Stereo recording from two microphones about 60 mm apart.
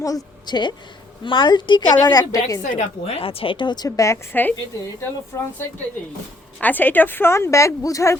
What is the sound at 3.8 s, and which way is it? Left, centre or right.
Speech, left.